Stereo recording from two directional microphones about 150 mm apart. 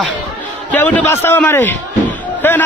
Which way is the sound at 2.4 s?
10° left (ahead or behind).